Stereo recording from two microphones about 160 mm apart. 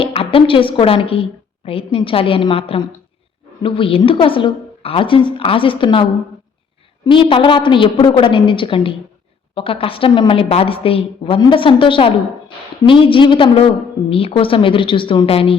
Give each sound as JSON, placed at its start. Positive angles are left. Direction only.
{"t": 0.0, "sound": "a woman's voice", "side_deg": 35}